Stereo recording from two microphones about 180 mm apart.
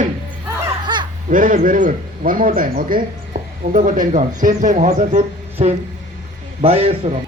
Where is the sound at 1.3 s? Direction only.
50° right (ahead or behind).